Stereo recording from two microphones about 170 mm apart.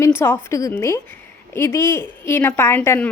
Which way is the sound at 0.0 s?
15° left (ahead or behind).